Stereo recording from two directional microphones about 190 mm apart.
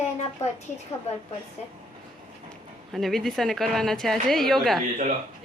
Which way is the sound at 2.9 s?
Centre (ahead or behind).